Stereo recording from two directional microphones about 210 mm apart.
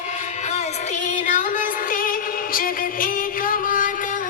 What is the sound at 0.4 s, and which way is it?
Music, 35° left (ahead or behind).